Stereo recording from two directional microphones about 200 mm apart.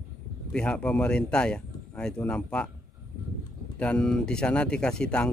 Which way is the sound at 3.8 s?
5° left (ahead or behind).